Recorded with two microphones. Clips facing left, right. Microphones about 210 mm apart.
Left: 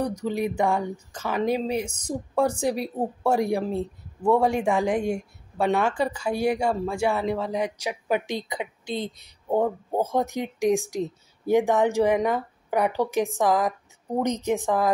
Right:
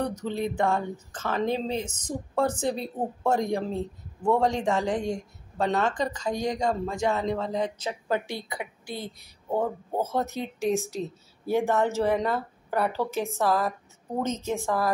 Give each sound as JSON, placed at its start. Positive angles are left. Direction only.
{"t": 0.0, "sound": "a woman's voice", "side_deg": 10}